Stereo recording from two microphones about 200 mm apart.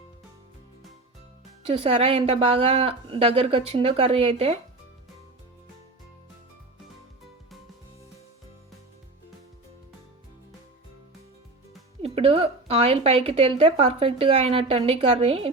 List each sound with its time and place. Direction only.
1.7 s a woman's voice: 30° right (ahead or behind)
12.0 s a woman's voice: 30° right (ahead or behind)